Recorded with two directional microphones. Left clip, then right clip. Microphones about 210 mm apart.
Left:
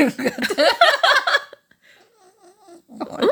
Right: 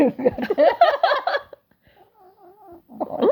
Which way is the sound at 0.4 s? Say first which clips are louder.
Left 1 dB; 20° left (ahead or behind).